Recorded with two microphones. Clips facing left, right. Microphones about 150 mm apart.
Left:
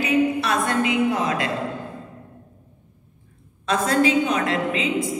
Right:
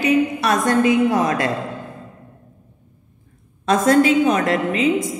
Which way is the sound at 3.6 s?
40° right (ahead or behind).